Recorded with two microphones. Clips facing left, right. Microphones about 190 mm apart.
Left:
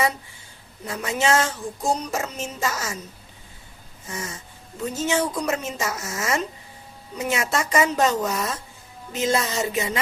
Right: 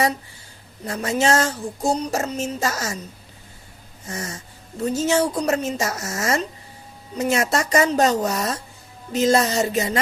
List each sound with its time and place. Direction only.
0.9 s speech: 40° right (ahead or behind)
4.1 s speech: 40° right (ahead or behind)